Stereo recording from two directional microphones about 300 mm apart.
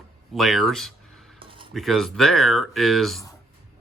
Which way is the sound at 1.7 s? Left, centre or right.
Centre.